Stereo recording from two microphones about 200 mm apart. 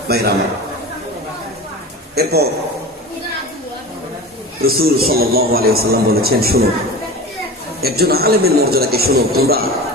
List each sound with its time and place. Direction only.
0.1 s a man's voice: 55° right (ahead or behind)
2.1 s a man's voice: 55° right (ahead or behind)
4.6 s a man's voice: 50° right (ahead or behind)
7.8 s a man's voice: 50° right (ahead or behind)